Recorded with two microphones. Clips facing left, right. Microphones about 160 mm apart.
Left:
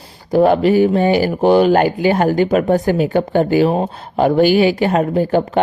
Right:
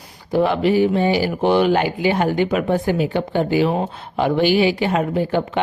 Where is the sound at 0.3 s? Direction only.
45° left (ahead or behind).